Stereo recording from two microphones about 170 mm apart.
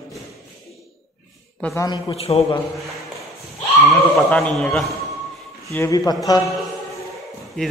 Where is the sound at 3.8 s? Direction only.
Centre (ahead or behind).